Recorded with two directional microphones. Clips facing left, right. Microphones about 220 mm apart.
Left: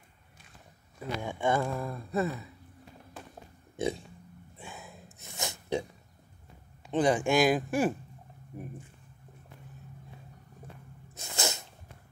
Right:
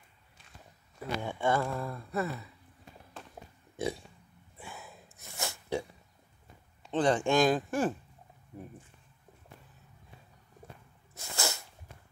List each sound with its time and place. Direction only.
1.2 s speech: 15° left (ahead or behind)
3.7 s a sound: 20° left (ahead or behind)
4.6 s snort: 20° left (ahead or behind)
6.9 s speech: 10° left (ahead or behind)
11.1 s sneeze: 20° left (ahead or behind)